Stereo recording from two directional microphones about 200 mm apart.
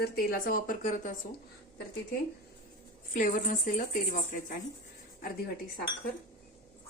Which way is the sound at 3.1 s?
40° left (ahead or behind).